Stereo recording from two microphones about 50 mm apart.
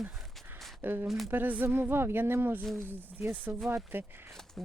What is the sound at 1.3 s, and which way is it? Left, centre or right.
Speech, right.